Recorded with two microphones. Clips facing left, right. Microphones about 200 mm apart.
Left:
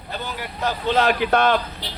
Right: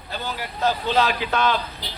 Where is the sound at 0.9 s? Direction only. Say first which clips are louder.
Left 3 dB; 55° left (ahead or behind).